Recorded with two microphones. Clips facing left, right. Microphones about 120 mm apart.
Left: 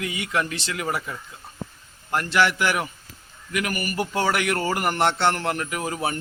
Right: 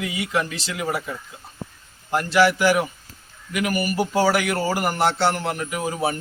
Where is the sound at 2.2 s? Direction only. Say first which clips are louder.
Right 5 dB; 25° right (ahead or behind).